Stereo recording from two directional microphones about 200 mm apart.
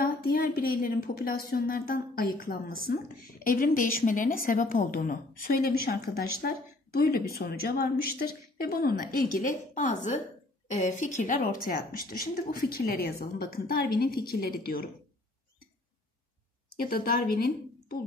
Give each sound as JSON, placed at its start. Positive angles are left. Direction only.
{"t": 0.0, "sound": "a woman's voice", "side_deg": 50}
{"t": 16.9, "sound": "speech", "side_deg": 50}